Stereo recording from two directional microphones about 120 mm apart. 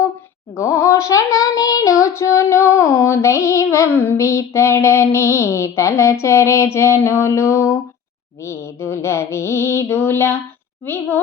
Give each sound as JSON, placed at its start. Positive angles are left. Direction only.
{"t": 0.5, "sound": "child singing", "side_deg": 25}